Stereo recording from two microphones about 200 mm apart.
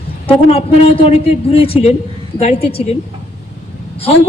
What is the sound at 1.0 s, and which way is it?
A man's voice, 30° left (ahead or behind).